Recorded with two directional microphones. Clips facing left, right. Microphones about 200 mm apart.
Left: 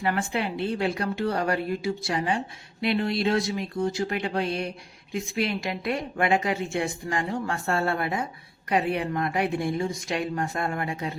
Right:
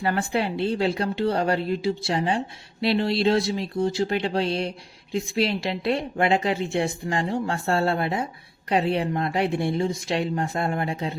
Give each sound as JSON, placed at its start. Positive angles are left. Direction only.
{"t": 0.0, "sound": "a woman's voice", "side_deg": -35}